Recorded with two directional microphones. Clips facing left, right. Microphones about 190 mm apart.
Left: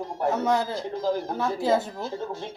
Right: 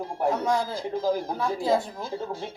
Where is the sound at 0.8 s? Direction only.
10° right (ahead or behind).